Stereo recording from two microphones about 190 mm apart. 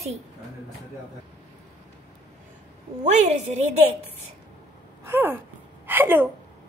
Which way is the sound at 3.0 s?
35° right (ahead or behind).